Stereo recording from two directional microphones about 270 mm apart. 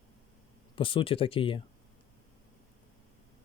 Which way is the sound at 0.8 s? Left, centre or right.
Centre.